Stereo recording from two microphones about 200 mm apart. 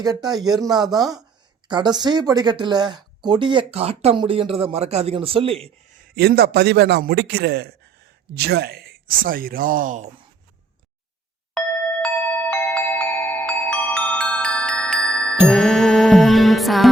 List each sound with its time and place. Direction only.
0.0 s speech: 20° right (ahead or behind)
6.1 s a man's voice: 55° right (ahead or behind)
12.0 s glockenspiel: 5° left (ahead or behind)
15.4 s music: centre (ahead or behind)